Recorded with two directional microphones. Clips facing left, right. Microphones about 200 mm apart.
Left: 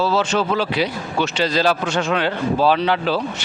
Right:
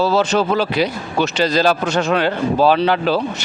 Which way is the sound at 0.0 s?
40° right (ahead or behind).